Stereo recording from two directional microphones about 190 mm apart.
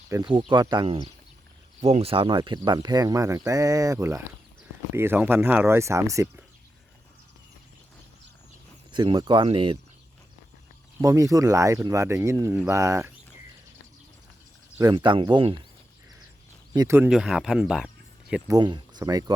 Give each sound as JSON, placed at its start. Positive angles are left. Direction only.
{"t": 0.1, "sound": "speech", "side_deg": -25}
{"t": 1.8, "sound": "speech", "side_deg": -35}
{"t": 8.9, "sound": "speech", "side_deg": -25}
{"t": 11.0, "sound": "speech", "side_deg": -15}
{"t": 14.8, "sound": "speech", "side_deg": -20}
{"t": 16.7, "sound": "speech", "side_deg": -15}
{"t": 17.1, "sound": "speech", "side_deg": -5}
{"t": 18.5, "sound": "speech", "side_deg": -25}